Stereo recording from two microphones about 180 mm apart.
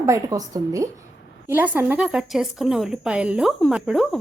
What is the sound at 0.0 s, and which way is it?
A woman's voice, 20° right (ahead or behind).